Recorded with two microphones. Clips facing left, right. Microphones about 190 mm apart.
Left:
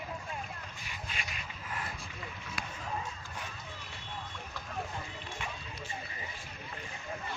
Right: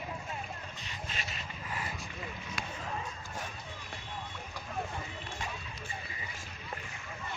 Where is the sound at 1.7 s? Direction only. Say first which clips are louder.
Right 1 dB; centre (ahead or behind).